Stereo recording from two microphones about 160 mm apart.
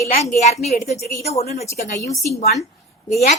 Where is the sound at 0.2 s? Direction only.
45° left (ahead or behind).